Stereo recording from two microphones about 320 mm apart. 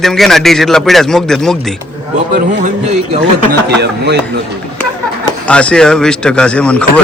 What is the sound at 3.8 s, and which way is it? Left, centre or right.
Speech, right.